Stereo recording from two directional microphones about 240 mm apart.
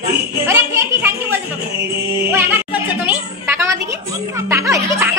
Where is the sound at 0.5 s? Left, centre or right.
Centre.